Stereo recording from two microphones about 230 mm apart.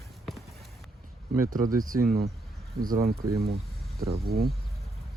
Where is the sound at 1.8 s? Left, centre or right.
Right.